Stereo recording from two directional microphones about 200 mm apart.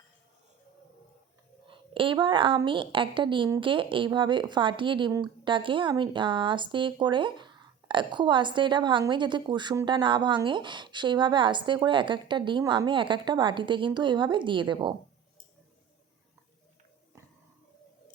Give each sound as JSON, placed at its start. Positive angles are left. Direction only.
{"t": 1.6, "sound": "a woman's voice", "side_deg": -25}